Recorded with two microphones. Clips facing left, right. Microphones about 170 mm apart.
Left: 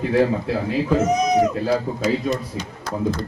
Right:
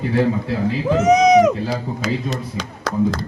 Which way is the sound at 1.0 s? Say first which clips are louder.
Right 9 dB; 85° right.